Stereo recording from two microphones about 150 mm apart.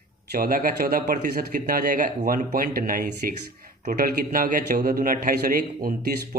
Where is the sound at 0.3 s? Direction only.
70° right (ahead or behind).